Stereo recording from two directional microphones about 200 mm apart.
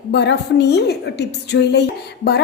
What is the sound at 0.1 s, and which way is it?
A woman's voice, 60° left (ahead or behind).